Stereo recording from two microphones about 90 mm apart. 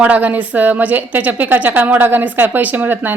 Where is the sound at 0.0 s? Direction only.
20° right (ahead or behind).